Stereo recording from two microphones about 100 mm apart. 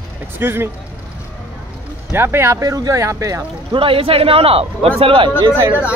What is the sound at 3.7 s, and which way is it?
A man's voice, 65° right (ahead or behind).